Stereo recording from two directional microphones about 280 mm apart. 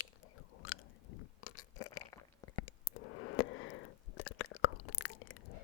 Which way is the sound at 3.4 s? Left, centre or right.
Left.